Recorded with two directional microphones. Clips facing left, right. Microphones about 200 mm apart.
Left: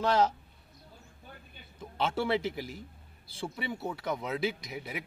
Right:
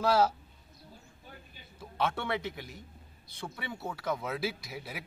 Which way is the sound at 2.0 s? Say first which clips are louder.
Left 4 dB; 25° left (ahead or behind).